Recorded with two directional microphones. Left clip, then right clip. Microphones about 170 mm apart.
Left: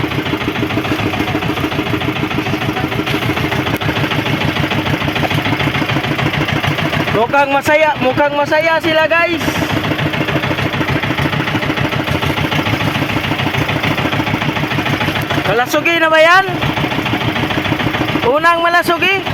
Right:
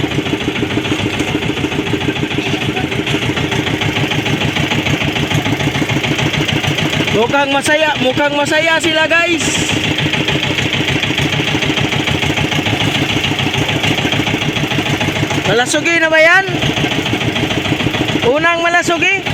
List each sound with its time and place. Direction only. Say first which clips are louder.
7.2 s speech: left 1 dB; 15° left (ahead or behind)
7.8 s speech: left 1 dB; centre (ahead or behind)
15.9 s speech: even; 35° left (ahead or behind)
18.4 s speech: left 1 dB; 40° left (ahead or behind)